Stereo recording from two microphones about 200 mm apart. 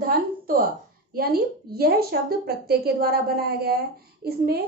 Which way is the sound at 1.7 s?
50° right (ahead or behind).